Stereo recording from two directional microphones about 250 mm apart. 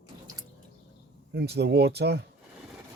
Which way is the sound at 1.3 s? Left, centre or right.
Right.